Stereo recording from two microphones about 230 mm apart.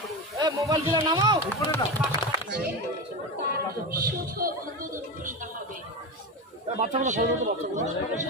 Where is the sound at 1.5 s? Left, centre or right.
Centre.